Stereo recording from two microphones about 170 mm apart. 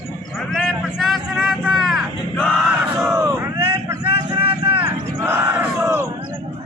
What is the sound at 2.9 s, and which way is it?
Vehicle, 15° right (ahead or behind).